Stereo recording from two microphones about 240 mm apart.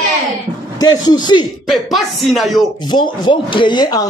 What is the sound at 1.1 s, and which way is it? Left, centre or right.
Speech, centre.